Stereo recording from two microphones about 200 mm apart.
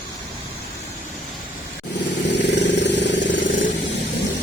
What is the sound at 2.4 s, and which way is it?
Vehicle, 60° left (ahead or behind).